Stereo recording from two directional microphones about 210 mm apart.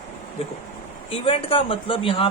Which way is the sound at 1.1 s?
25° left (ahead or behind).